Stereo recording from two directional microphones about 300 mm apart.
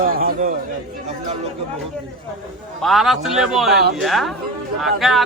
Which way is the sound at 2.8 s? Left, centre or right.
Centre.